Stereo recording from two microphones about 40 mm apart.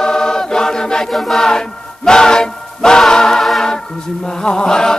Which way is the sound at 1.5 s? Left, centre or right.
Centre.